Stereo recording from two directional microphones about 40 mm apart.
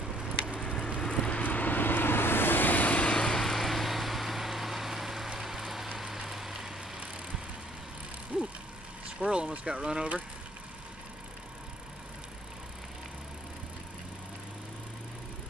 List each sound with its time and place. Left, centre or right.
0.5 s vehicle: left
1.3 s vehicle: left
3.3 s vehicle: centre
8.3 s vehicle: right
9.2 s speech: right